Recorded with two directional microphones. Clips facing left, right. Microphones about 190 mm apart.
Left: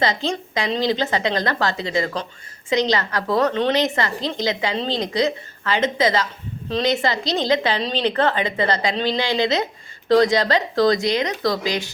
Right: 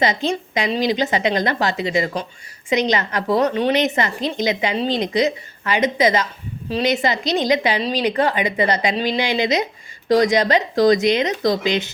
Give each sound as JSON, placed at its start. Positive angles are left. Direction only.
{"t": 0.0, "sound": "a woman's voice", "side_deg": -20}